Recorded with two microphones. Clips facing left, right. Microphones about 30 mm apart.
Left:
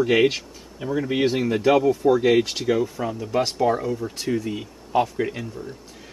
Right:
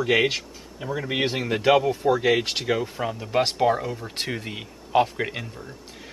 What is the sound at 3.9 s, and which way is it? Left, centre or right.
Speech, right.